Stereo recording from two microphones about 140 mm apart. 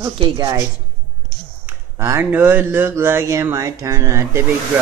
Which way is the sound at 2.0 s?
20° right (ahead or behind).